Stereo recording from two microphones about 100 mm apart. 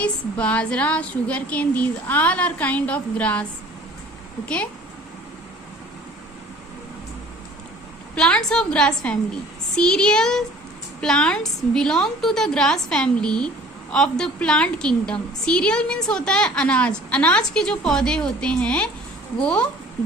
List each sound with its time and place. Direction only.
0.0 s a woman's voice: 15° left (ahead or behind)
4.4 s a woman's voice: 15° left (ahead or behind)
8.1 s a woman's voice: 10° left (ahead or behind)